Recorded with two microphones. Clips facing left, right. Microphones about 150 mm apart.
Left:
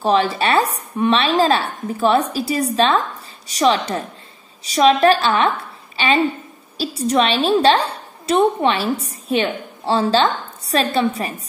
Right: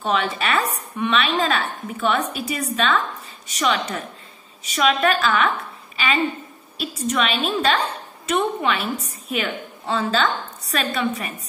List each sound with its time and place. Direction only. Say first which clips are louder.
0.0 s a woman's voice: left 6 dB; 35° left (ahead or behind)